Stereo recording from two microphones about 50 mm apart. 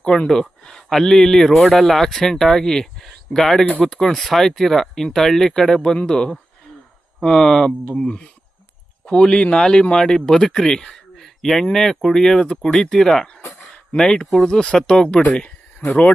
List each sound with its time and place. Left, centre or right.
0.3 s speech: centre